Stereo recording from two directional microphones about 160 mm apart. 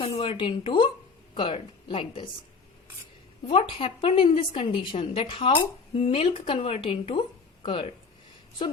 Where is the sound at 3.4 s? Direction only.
35° left (ahead or behind).